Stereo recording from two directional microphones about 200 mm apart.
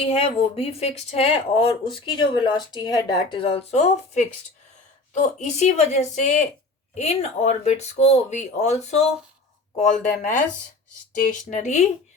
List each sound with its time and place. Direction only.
0.0 s speech: 30° left (ahead or behind)